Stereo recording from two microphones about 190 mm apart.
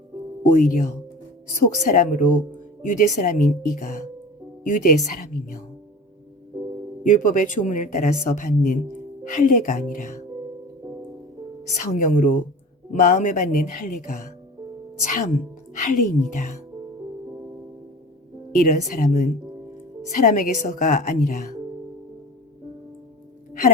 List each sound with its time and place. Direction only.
0.4 s a woman's voice: 45° left (ahead or behind)
7.0 s speech: 45° left (ahead or behind)
11.8 s a woman's voice: 40° left (ahead or behind)
18.7 s a woman's voice: 40° left (ahead or behind)